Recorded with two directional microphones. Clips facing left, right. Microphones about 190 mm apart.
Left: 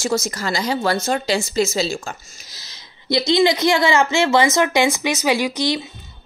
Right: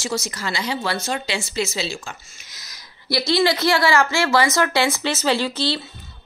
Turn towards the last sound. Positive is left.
turn(degrees=15)  # may be behind; listen again after turning